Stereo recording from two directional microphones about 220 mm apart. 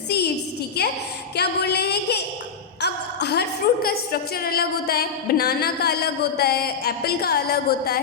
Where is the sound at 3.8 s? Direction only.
45° left (ahead or behind).